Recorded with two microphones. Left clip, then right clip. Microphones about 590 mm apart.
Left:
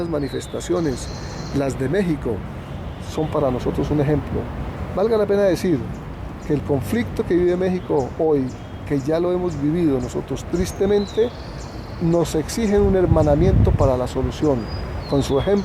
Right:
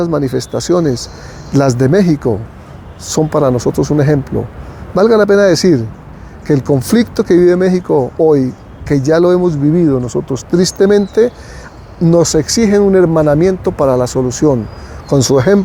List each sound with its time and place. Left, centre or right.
0.0 s speech: right
1.5 s speech: right
3.3 s speech: right